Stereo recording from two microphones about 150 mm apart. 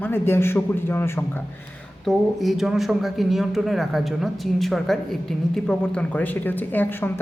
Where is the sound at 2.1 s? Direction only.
Centre (ahead or behind).